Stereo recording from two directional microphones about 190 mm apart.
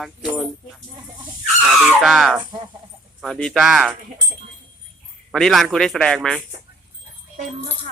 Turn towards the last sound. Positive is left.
turn(degrees=5)  # may be behind; listen again after turning